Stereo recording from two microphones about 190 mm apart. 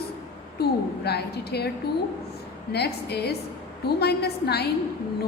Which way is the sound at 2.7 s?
60° left (ahead or behind).